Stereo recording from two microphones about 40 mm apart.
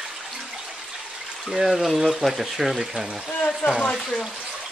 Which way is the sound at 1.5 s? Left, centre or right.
Centre.